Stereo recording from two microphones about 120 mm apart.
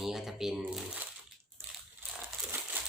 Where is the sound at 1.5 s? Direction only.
15° right (ahead or behind).